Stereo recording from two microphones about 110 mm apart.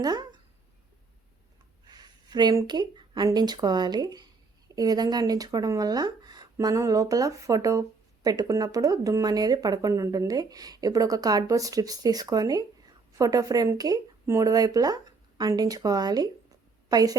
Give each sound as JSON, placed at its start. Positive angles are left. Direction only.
{"t": 0.0, "sound": "speech", "side_deg": -40}
{"t": 1.9, "sound": "a sound", "side_deg": -40}
{"t": 2.6, "sound": "speech", "side_deg": -40}